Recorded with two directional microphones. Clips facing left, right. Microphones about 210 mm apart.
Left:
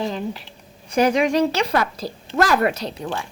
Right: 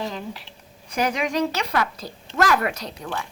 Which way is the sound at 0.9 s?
30° left (ahead or behind).